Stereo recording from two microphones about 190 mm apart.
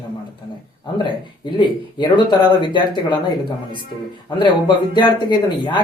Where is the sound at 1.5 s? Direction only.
25° left (ahead or behind).